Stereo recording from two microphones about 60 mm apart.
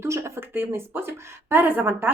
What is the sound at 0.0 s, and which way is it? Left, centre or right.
Speech, right.